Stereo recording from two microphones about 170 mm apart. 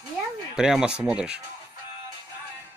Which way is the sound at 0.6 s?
5° right (ahead or behind).